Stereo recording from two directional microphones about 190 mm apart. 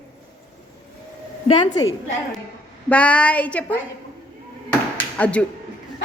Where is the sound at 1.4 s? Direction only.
25° left (ahead or behind).